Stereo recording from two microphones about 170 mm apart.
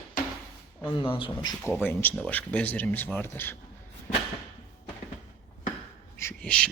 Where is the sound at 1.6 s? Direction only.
10° left (ahead or behind).